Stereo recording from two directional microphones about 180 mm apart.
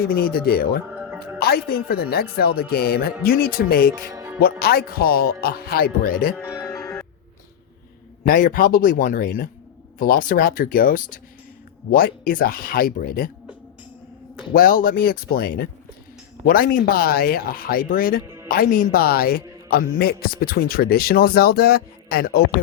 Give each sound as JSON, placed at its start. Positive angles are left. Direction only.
{"t": 0.0, "sound": "a man's voice", "side_deg": 55}
{"t": 0.9, "sound": "music", "side_deg": -5}
{"t": 1.4, "sound": "a man's voice", "side_deg": 60}
{"t": 6.4, "sound": "music", "side_deg": 15}
{"t": 8.3, "sound": "speech", "side_deg": 50}
{"t": 14.5, "sound": "a man's voice", "side_deg": 55}